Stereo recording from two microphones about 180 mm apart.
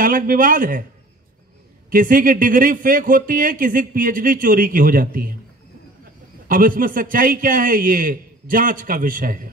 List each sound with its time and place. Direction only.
0.0 s speech: 50° right (ahead or behind)
1.9 s speech: 50° right (ahead or behind)
6.4 s speech: 50° right (ahead or behind)